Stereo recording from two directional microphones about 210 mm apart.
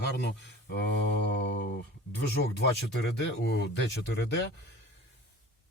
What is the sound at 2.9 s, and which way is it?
Speech, 55° left (ahead or behind).